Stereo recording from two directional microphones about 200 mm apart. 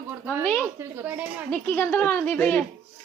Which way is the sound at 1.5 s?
10° left (ahead or behind).